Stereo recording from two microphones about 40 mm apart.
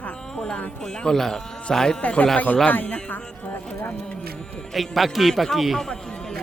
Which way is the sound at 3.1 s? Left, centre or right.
Left.